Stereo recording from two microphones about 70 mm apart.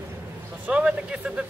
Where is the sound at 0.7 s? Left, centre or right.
Centre.